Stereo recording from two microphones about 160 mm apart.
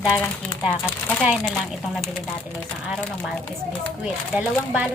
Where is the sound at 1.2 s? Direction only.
5° right (ahead or behind).